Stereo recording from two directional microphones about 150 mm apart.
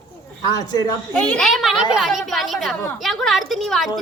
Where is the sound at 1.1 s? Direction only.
5° left (ahead or behind).